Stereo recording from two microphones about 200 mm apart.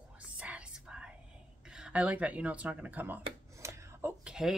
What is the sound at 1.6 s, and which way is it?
Speech, 5° right (ahead or behind).